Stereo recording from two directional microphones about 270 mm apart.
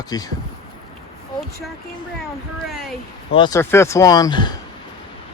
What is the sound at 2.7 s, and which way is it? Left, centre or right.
Speech, centre.